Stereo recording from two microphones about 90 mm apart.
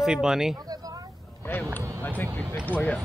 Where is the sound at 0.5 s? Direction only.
45° right (ahead or behind).